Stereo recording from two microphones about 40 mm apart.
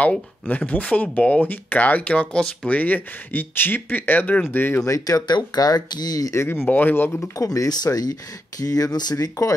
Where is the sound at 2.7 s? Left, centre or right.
Left.